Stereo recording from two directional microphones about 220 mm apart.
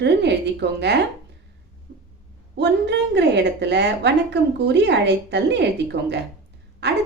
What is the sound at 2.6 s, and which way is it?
A woman's voice, 50° right (ahead or behind).